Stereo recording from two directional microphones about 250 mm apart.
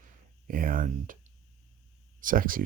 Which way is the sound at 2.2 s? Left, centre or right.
Right.